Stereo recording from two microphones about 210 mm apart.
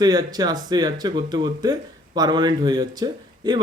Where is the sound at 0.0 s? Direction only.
20° right (ahead or behind).